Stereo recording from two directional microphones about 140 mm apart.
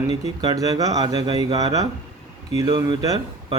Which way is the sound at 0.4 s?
25° right (ahead or behind).